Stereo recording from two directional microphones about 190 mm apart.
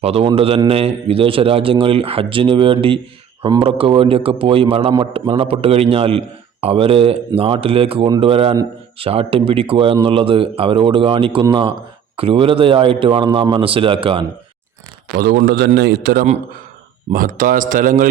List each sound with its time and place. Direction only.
0.0 s a man's voice: 30° right (ahead or behind)
15.1 s a man's voice: 55° right (ahead or behind)
17.1 s speech: 45° right (ahead or behind)